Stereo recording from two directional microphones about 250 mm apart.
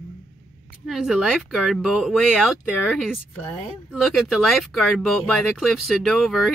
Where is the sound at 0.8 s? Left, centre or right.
Centre.